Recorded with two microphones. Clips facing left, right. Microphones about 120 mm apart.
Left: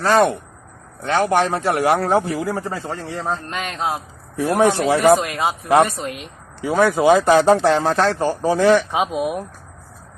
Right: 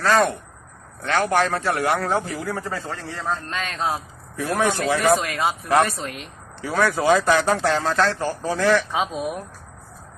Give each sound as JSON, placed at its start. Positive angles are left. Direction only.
{"t": 0.0, "sound": "a man's voice", "side_deg": 25}
{"t": 3.5, "sound": "speech", "side_deg": 10}
{"t": 4.4, "sound": "a man's voice", "side_deg": 30}
{"t": 6.0, "sound": "speech", "side_deg": 10}
{"t": 6.7, "sound": "a man's voice", "side_deg": 20}
{"t": 9.0, "sound": "speech", "side_deg": 5}